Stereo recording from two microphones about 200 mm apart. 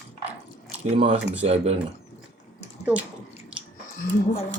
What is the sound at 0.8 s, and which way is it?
Speech, 30° right (ahead or behind).